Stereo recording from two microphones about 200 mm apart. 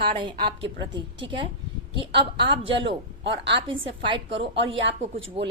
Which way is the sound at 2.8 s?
65° right (ahead or behind).